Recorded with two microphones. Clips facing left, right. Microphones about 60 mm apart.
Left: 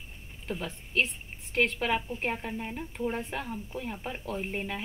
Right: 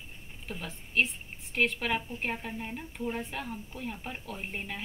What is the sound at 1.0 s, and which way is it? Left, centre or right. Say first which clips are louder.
Speech: even; left.